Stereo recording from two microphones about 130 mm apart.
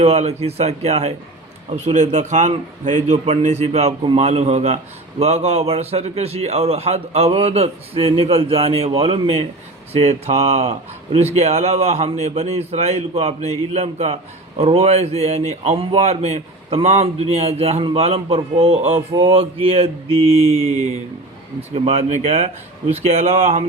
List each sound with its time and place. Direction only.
0.0 s a man's voice: 55° right (ahead or behind)
20.2 s a man's voice: 55° right (ahead or behind)